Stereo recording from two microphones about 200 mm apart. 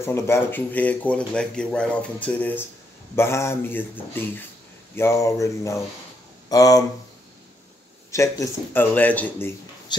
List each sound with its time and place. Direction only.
0.0 s speech: 10° left (ahead or behind)
8.1 s speech: 15° left (ahead or behind)